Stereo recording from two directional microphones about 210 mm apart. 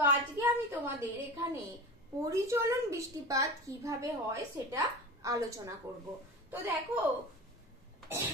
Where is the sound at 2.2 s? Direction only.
15° right (ahead or behind).